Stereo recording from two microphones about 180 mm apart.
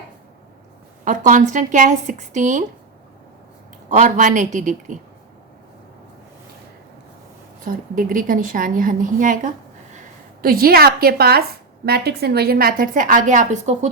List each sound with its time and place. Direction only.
1.0 s a woman's voice: 45° right (ahead or behind)
3.8 s a woman's voice: 45° right (ahead or behind)
7.6 s a woman's voice: 50° right (ahead or behind)